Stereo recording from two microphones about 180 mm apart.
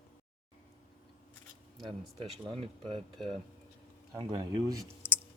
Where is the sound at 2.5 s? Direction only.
30° right (ahead or behind).